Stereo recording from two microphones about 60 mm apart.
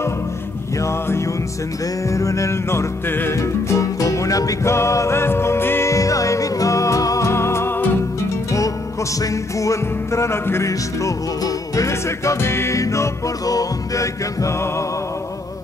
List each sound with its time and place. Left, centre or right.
0.8 s music: left
2.0 s music: left
3.1 s music: left
3.3 s music: left
4.6 s music: left
5.9 s music: left
7.2 s music: left
9.2 s music: left
11.1 s music: left
11.9 s music: left